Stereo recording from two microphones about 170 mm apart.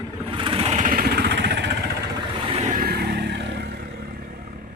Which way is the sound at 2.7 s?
60° right (ahead or behind).